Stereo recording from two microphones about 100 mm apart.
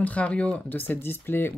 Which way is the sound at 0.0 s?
15° left (ahead or behind).